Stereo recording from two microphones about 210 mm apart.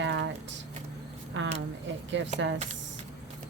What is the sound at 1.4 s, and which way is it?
Speech, 60° right (ahead or behind).